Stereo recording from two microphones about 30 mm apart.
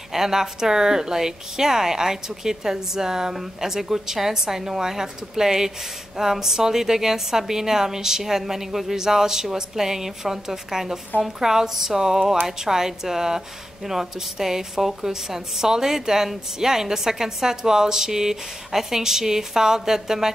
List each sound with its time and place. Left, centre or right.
0.1 s a woman's voice: centre